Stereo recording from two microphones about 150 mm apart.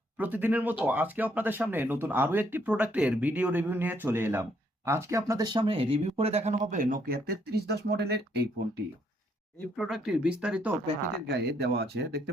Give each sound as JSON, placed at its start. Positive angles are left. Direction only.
{"t": 0.2, "sound": "speech", "side_deg": -10}
{"t": 9.7, "sound": "speech", "side_deg": 0}
{"t": 11.3, "sound": "speech", "side_deg": -90}